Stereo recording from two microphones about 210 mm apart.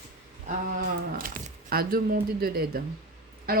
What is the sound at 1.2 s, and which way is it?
Speech, 45° right (ahead or behind).